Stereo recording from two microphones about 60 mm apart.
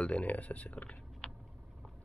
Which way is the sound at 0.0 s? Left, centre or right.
Left.